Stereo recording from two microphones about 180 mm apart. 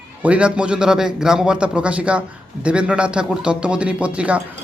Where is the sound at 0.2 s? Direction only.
5° right (ahead or behind).